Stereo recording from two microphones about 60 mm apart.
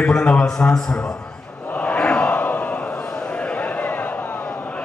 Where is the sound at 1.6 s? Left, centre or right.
Left.